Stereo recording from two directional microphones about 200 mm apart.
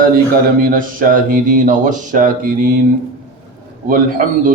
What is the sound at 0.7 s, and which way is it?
Speech, 45° right (ahead or behind).